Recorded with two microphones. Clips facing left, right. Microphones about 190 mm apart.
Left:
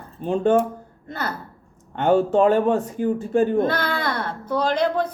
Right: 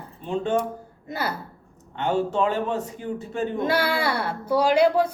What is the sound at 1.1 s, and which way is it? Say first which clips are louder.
Music: even; 10° right (ahead or behind).